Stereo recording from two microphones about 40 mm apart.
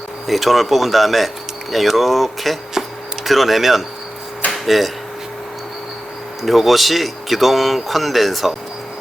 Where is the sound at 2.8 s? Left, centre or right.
Centre.